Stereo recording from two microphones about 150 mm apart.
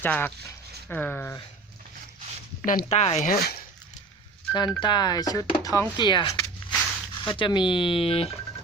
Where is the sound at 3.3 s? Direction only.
90° left.